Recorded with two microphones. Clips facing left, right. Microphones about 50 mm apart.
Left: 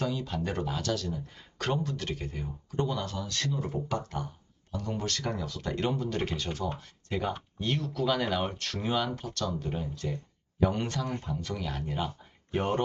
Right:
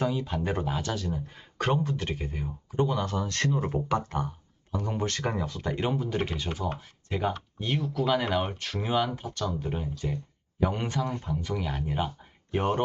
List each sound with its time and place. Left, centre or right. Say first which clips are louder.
0.0 s speech: right 3 dB; centre